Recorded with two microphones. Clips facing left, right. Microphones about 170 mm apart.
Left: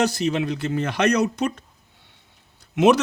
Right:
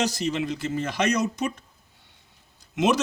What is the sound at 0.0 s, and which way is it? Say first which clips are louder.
A man's voice: left 4 dB; 60° left (ahead or behind).